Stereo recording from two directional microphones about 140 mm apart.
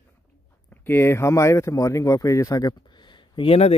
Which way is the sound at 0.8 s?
15° left (ahead or behind).